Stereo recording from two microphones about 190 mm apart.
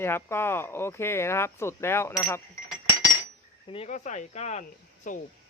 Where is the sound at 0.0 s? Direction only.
10° left (ahead or behind).